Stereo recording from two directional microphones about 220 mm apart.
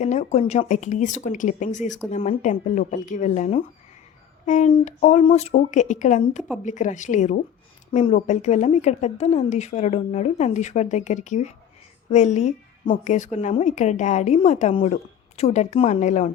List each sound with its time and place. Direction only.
0.0 s a woman's voice: 30° left (ahead or behind)